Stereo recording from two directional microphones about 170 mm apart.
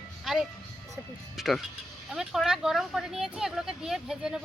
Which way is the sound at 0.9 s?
Centre (ahead or behind).